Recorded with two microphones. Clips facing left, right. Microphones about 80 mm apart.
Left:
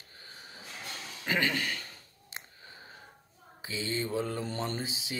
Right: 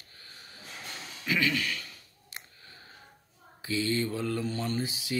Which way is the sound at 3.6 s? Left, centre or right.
Centre.